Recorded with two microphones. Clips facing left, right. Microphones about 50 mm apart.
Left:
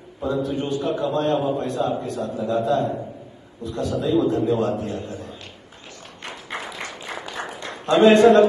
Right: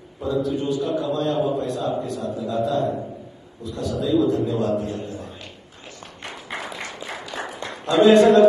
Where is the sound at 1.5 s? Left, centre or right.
Left.